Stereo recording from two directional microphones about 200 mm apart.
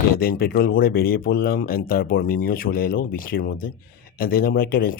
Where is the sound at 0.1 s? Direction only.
45° left (ahead or behind).